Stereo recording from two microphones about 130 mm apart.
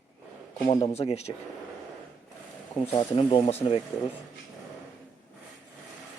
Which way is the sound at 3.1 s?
50° left (ahead or behind).